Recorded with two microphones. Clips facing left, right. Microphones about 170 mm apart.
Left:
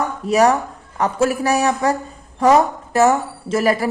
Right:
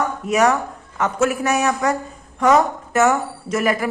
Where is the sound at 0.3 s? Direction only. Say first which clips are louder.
Left 3 dB; 35° left (ahead or behind).